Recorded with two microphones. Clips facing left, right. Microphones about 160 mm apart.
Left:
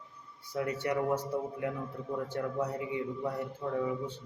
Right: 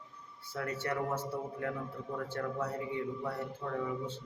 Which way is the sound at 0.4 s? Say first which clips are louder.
Left 4 dB; 15° left (ahead or behind).